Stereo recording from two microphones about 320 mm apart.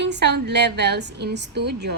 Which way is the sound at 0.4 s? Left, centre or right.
Right.